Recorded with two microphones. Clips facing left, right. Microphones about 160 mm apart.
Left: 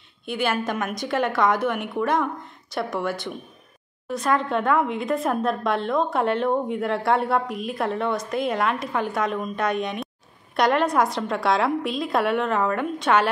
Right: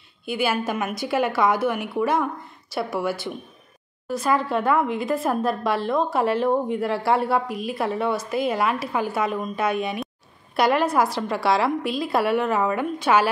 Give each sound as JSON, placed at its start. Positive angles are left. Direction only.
{"t": 0.2, "sound": "speech", "side_deg": -5}